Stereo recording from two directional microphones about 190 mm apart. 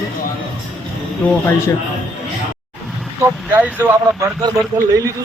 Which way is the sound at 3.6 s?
10° right (ahead or behind).